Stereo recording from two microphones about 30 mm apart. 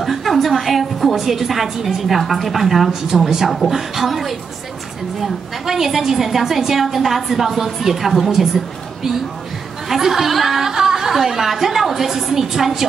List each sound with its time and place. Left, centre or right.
0.0 s a woman's voice: centre
10.7 s a sound: centre
11.1 s a woman's voice: centre